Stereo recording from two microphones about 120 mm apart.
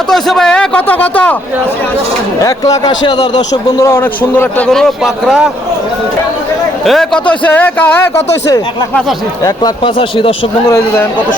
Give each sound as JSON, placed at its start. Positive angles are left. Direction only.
{"t": 0.1, "sound": "a man's voice", "side_deg": 5}
{"t": 2.7, "sound": "speech", "side_deg": 35}
{"t": 3.5, "sound": "speech", "side_deg": 30}
{"t": 4.7, "sound": "a man's voice", "side_deg": 5}
{"t": 6.8, "sound": "a man's voice", "side_deg": 0}
{"t": 9.8, "sound": "speech", "side_deg": 45}